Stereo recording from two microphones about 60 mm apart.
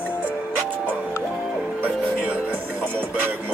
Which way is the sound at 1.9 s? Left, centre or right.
Left.